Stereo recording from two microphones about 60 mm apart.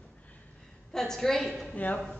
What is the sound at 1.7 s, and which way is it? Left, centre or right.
Speech, left.